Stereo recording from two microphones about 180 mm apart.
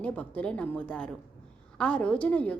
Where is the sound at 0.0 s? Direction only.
10° left (ahead or behind).